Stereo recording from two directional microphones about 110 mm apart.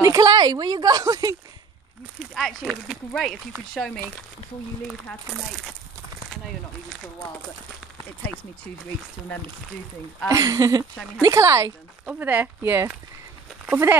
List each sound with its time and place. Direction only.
0.0 s a woman's voice: 30° right (ahead or behind)
2.3 s speech: centre (ahead or behind)
5.3 s speech: centre (ahead or behind)
10.2 s a woman's voice: 30° right (ahead or behind)
12.1 s speech: 15° right (ahead or behind)